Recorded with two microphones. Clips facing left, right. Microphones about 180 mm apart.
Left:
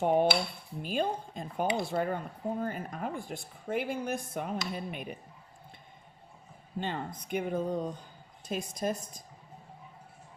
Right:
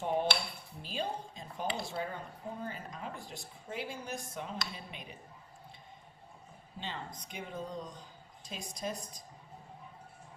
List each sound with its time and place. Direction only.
0.0 s a woman's voice: 55° left (ahead or behind)
6.7 s a woman's voice: 50° left (ahead or behind)